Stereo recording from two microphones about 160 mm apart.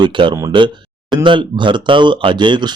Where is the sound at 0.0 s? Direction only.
30° right (ahead or behind).